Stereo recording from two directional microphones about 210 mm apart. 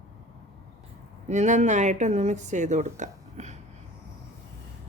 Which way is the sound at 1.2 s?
35° right (ahead or behind).